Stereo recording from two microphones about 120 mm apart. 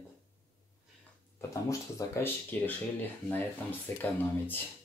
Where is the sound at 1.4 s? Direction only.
25° left (ahead or behind).